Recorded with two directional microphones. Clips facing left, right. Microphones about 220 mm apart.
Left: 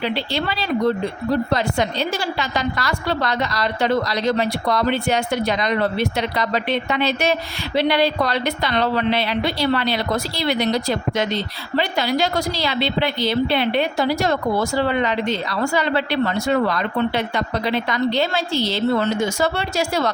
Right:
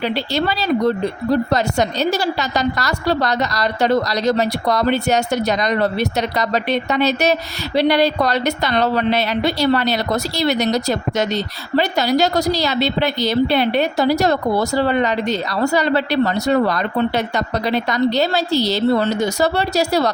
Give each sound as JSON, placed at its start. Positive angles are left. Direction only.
{"t": 0.3, "sound": "a woman's voice", "side_deg": -40}